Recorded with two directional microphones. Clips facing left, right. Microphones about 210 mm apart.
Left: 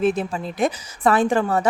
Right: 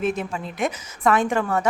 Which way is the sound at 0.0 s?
35° left (ahead or behind).